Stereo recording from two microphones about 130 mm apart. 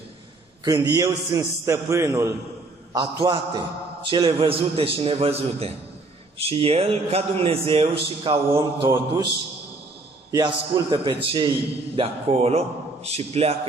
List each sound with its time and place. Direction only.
0.7 s a man's voice: 35° right (ahead or behind)
1.4 s a man's voice: 20° right (ahead or behind); by 9.0 s 40° right (ahead or behind)
10.3 s a man's voice: 35° right (ahead or behind); by 13.6 s 50° right (ahead or behind)